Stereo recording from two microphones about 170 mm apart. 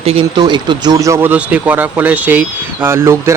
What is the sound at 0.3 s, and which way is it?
Speech, 25° right (ahead or behind).